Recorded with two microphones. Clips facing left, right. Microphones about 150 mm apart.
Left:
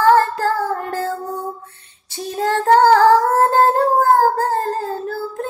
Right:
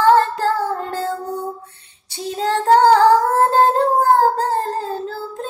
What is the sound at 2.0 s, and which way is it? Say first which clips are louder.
Female singing: left 1 dB; 20° right (ahead or behind).